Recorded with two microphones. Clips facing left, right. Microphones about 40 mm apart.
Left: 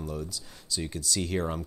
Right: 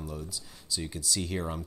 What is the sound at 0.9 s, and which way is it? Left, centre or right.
Speech, centre.